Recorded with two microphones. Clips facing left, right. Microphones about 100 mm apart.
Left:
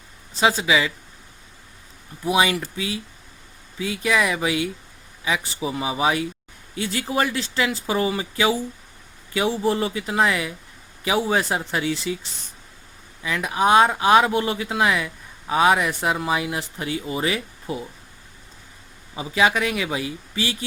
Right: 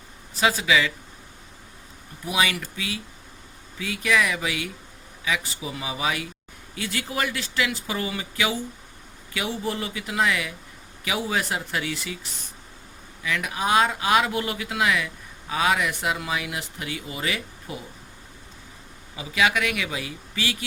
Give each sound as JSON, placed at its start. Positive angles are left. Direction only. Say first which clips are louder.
{"t": 0.3, "sound": "speech", "louder": "left 2 dB", "side_deg": 25}
{"t": 2.2, "sound": "speech", "louder": "left 5 dB", "side_deg": 25}
{"t": 13.2, "sound": "speech", "louder": "left 6 dB", "side_deg": 30}
{"t": 19.1, "sound": "speech", "louder": "left 3 dB", "side_deg": 30}